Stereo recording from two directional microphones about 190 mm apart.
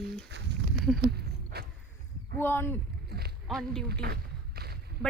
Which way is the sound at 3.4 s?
Centre (ahead or behind).